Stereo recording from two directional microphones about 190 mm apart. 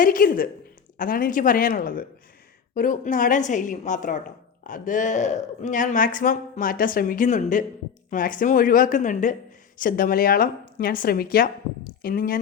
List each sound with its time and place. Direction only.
0.0 s speech: 45° left (ahead or behind)